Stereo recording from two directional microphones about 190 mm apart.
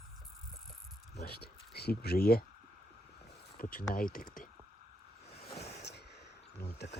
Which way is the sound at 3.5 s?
50° left (ahead or behind).